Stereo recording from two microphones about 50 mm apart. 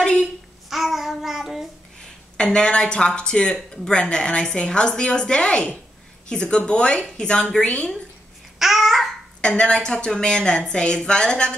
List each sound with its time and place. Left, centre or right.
0.0 s a sound: centre
0.7 s child singing: centre
2.3 s a woman's voice: centre
8.5 s babbling: centre
9.4 s a woman's voice: centre